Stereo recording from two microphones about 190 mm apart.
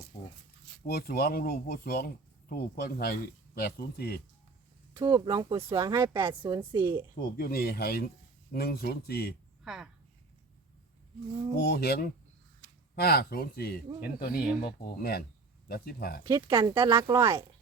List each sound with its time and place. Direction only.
0.9 s speech: 55° left (ahead or behind)
4.9 s speech: 20° right (ahead or behind)
6.2 s speech: 25° right (ahead or behind)
7.3 s speech: 50° left (ahead or behind)
9.6 s speech: centre (ahead or behind)
11.5 s speech: 55° left (ahead or behind)
12.6 s a sound: 45° right (ahead or behind)
13.0 s speech: 55° left (ahead or behind)
16.2 s speech: 20° right (ahead or behind)